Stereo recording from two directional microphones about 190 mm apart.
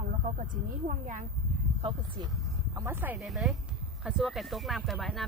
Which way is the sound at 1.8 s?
30° right (ahead or behind).